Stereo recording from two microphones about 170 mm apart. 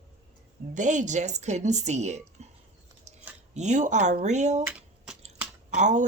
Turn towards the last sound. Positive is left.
turn(degrees=-45)  # may be behind; listen again after turning